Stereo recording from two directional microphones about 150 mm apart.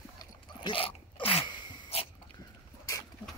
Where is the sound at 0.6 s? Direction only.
35° left (ahead or behind).